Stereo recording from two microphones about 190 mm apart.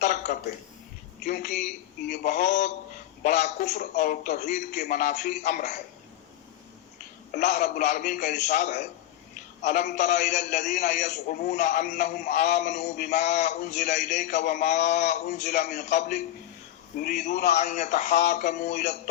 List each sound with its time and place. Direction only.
0.0 s a sound: 40° left (ahead or behind)
1.2 s a man's voice: 40° left (ahead or behind)
7.3 s a man's voice: 40° left (ahead or behind)